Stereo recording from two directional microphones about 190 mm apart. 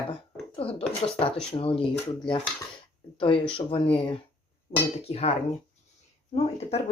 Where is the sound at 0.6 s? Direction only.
30° left (ahead or behind).